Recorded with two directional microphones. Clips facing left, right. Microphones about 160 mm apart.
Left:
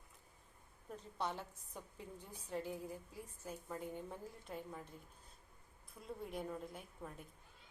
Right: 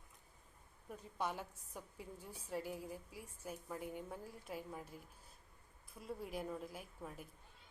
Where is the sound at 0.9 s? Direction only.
10° right (ahead or behind).